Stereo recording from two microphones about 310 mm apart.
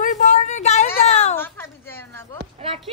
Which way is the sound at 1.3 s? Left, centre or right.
Centre.